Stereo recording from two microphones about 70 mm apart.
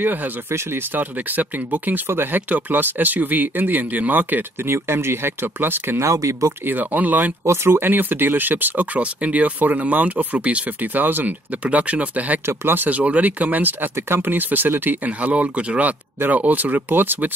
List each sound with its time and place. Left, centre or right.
0.0 s speech: right
6.0 s speech: right
6.6 s speech: right
7.4 s speech: right